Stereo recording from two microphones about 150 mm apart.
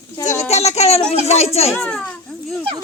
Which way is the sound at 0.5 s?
45° left (ahead or behind).